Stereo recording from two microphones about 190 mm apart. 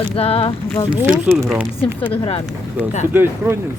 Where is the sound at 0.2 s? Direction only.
30° left (ahead or behind).